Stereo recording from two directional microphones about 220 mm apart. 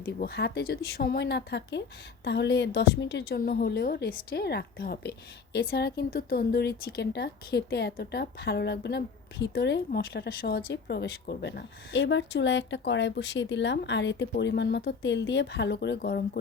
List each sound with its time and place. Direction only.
0.2 s speech: 50° left (ahead or behind)